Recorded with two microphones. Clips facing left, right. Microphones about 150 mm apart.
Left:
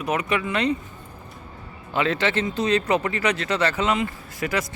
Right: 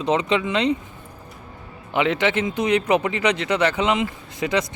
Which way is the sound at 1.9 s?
15° right (ahead or behind).